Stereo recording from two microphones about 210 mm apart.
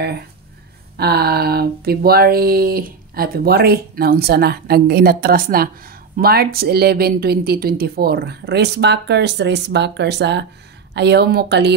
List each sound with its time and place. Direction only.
0.9 s speech: 50° right (ahead or behind)